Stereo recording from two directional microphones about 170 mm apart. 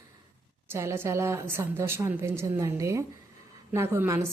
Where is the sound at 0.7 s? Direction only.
15° right (ahead or behind).